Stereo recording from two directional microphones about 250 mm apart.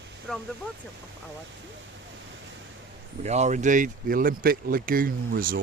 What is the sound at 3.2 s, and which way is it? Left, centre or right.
Speech, right.